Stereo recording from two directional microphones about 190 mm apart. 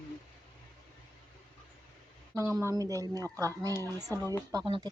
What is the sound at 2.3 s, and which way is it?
Speech, 10° right (ahead or behind).